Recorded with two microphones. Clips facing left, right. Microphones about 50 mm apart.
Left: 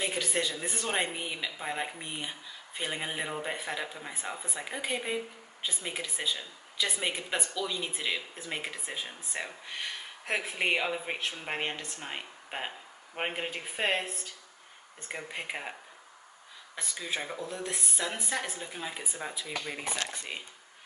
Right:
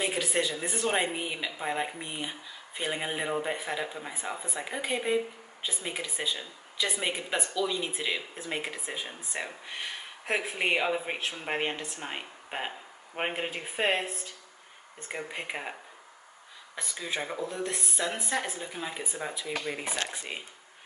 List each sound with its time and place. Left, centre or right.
0.0 s speech: centre
16.7 s speech: centre